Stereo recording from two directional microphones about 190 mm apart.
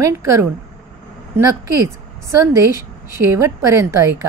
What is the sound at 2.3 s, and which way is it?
A woman's voice, 15° right (ahead or behind).